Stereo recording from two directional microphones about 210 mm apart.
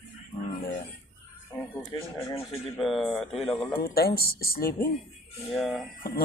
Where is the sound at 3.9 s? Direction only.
45° left (ahead or behind).